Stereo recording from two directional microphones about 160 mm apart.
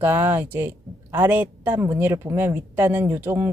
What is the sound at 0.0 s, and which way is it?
Speech, 10° right (ahead or behind).